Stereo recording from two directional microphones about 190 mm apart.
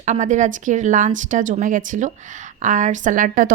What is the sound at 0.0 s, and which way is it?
A woman's voice, 40° right (ahead or behind).